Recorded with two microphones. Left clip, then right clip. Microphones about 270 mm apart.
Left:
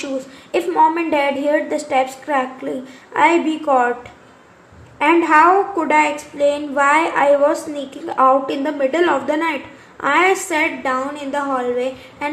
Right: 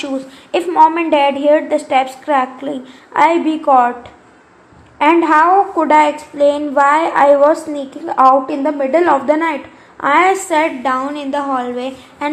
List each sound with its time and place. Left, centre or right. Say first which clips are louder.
0.5 s a woman's voice: right 4 dB; centre
4.9 s a woman's voice: right 2 dB; right